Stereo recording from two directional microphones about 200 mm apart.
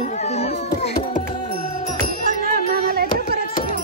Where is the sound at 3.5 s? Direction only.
45° left (ahead or behind).